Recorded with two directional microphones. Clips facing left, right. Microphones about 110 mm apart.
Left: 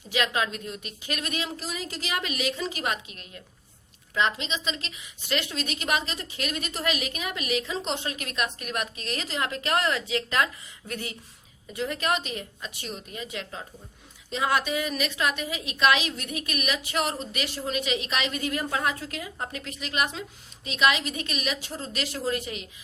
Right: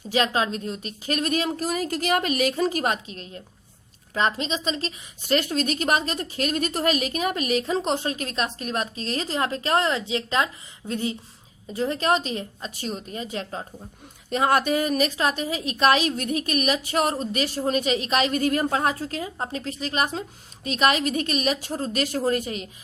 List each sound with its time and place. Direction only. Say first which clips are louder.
0.1 s a woman's voice: right 4 dB; 35° right (ahead or behind)
14.3 s a woman's voice: right 5 dB; 50° right (ahead or behind)